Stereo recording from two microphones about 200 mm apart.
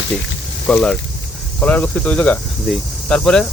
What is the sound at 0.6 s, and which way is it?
Speech, 5° left (ahead or behind).